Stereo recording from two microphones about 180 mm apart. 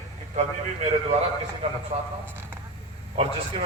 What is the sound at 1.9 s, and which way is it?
Speech, 40° right (ahead or behind).